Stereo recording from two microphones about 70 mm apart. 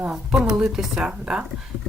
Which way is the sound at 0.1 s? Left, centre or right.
Centre.